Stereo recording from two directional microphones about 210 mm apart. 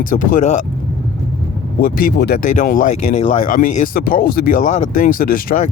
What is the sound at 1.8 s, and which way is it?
Speech, 45° left (ahead or behind).